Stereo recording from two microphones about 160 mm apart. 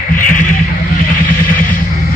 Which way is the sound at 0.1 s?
60° left (ahead or behind).